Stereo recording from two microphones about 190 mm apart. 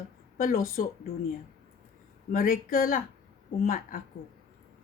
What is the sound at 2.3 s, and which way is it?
Speech, 50° left (ahead or behind).